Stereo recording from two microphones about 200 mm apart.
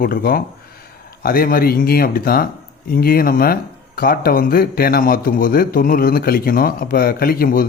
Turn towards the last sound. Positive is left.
turn(degrees=45)  # may be behind; listen again after turning